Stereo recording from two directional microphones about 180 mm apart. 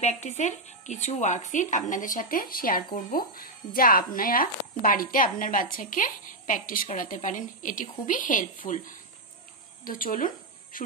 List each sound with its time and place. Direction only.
0.0 s speech: 40° left (ahead or behind)